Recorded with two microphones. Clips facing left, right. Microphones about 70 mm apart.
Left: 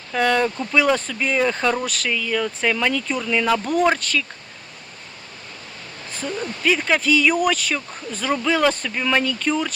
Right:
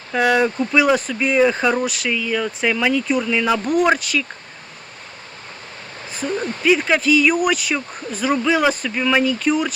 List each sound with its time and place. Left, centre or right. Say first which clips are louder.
0.1 s speech: right 2 dB; centre
6.1 s a sound: right 3 dB; centre
6.7 s speech: right 3 dB; centre